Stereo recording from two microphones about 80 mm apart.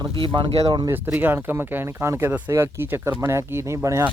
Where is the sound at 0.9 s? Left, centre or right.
Right.